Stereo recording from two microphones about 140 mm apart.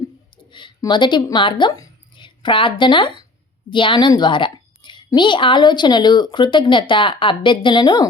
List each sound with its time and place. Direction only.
0.8 s a woman's voice: 35° left (ahead or behind)